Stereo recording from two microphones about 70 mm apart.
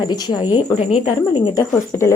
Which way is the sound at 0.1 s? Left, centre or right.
Left.